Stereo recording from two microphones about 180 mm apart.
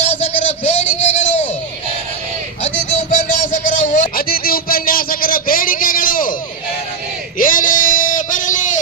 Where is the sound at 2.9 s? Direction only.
40° left (ahead or behind).